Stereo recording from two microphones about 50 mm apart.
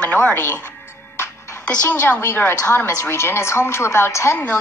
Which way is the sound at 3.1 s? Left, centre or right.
Left.